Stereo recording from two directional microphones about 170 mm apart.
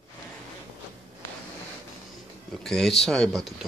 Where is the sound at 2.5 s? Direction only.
Centre (ahead or behind).